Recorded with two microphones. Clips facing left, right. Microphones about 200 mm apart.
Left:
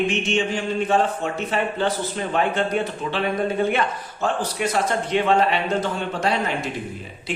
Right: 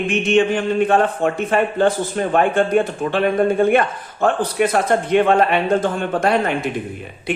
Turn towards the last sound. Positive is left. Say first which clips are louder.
# right 5 dB
turn(degrees=-55)  # may be behind; listen again after turning